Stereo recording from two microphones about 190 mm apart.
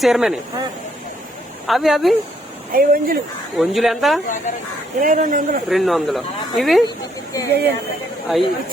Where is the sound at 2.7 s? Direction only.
50° right (ahead or behind).